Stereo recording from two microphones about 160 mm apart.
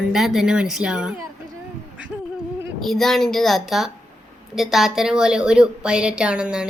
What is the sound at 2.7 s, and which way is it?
A woman's voice, centre (ahead or behind).